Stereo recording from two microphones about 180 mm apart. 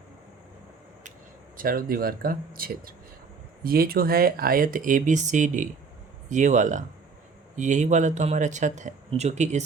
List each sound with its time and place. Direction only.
1.5 s speech: 55° right (ahead or behind)